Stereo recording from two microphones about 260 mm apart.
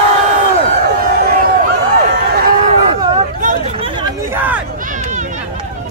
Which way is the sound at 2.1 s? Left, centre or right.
Right.